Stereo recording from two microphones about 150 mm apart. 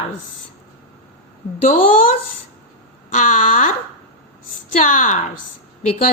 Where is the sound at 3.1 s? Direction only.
55° left (ahead or behind).